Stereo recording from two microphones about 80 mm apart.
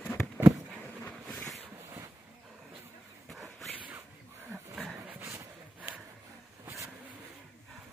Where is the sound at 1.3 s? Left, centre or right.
Centre.